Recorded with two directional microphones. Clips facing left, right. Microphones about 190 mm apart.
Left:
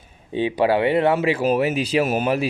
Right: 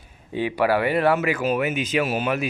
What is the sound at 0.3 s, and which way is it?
Speech, 20° left (ahead or behind).